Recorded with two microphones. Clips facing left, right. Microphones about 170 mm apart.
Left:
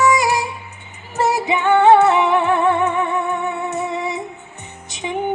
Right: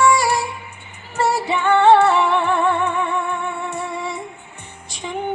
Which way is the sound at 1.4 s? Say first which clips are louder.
Left 2 dB; 20° left (ahead or behind).